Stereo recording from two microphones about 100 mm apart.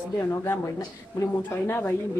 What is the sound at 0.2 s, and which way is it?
Speech, 25° left (ahead or behind).